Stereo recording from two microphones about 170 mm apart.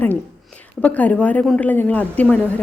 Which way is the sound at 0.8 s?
10° left (ahead or behind).